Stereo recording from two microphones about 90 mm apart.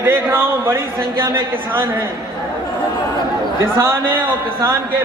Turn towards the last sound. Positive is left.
turn(degrees=-25)  # may be behind; listen again after turning